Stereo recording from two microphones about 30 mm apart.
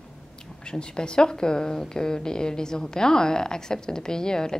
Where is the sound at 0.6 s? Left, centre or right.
Left.